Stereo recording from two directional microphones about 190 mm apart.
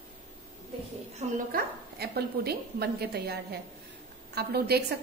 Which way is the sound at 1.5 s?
55° right (ahead or behind).